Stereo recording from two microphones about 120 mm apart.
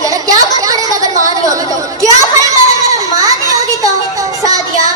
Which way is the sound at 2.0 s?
30° right (ahead or behind).